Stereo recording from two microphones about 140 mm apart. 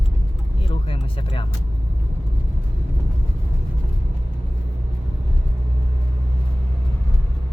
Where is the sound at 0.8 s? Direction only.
40° left (ahead or behind).